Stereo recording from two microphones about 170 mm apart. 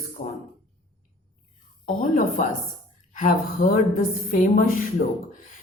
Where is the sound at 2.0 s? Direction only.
45° left (ahead or behind).